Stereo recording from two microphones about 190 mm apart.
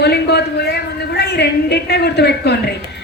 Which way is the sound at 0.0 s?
60° left (ahead or behind).